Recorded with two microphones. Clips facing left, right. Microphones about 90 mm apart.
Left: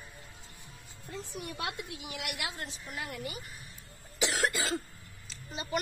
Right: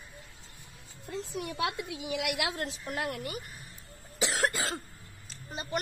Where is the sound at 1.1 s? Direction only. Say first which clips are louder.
Right 4 dB; 90° right.